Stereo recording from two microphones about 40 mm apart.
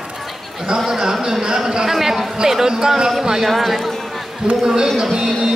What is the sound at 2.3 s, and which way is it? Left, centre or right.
A woman's voice, centre.